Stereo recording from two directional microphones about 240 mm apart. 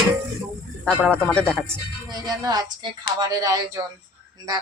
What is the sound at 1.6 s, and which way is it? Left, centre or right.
Speech, centre.